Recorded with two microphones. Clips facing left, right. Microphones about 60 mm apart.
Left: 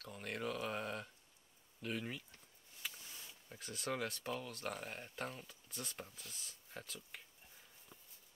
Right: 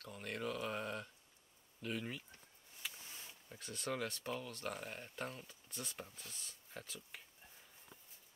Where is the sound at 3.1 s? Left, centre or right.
Centre.